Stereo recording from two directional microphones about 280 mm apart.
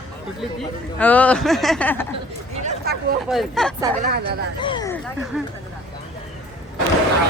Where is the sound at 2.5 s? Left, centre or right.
Right.